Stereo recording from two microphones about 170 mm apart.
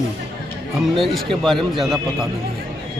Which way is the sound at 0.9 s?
Centre (ahead or behind).